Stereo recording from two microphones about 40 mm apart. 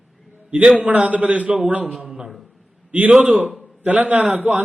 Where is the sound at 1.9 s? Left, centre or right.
Centre.